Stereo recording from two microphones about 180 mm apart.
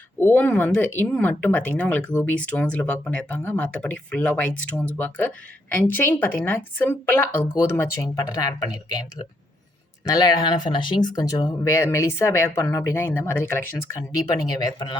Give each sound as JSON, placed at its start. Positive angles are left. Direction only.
{"t": 0.2, "sound": "speech", "side_deg": 10}
{"t": 10.1, "sound": "speech", "side_deg": 20}